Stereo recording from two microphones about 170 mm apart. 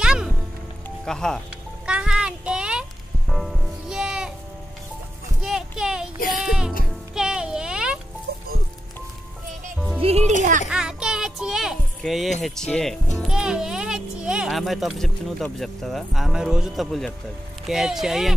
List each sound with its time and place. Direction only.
0.0 s music: 5° right (ahead or behind)
1.0 s speech: 5° left (ahead or behind)
1.9 s music: 5° right (ahead or behind)
5.4 s a sound: 5° right (ahead or behind)
6.3 s music: 5° right (ahead or behind)
7.2 s a sound: 5° right (ahead or behind)
8.3 s music: 65° right (ahead or behind)
10.0 s speech: 40° right (ahead or behind)
10.7 s music: 5° right (ahead or behind)
12.4 s speech: 5° left (ahead or behind)